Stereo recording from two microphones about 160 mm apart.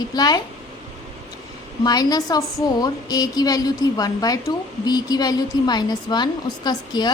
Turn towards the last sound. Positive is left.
turn(degrees=25)  # may be behind; listen again after turning